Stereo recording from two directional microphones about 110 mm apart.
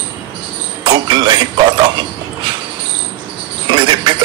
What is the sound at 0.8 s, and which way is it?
Speech, 45° right (ahead or behind).